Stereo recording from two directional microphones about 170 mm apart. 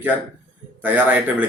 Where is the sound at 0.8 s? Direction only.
10° right (ahead or behind).